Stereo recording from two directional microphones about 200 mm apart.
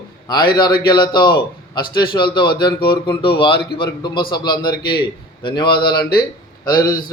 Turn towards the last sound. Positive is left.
turn(degrees=20)  # may be behind; listen again after turning